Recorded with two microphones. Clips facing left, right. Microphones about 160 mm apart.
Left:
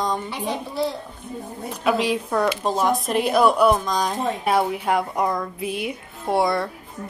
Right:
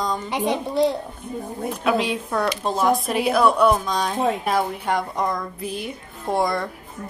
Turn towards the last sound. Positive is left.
turn(degrees=0)  # may be behind; listen again after turning